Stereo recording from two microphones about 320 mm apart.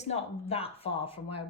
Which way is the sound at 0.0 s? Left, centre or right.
Centre.